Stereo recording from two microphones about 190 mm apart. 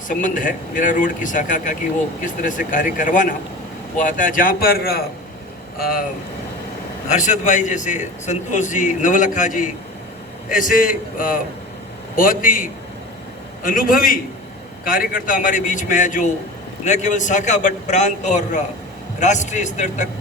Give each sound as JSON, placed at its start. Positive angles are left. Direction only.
{"t": 0.1, "sound": "speech", "side_deg": 45}
{"t": 7.1, "sound": "a man's voice", "side_deg": 40}